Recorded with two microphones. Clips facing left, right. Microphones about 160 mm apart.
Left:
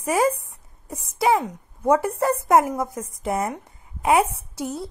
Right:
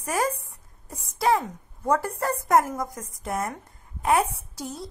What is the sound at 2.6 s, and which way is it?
Speech, 25° left (ahead or behind).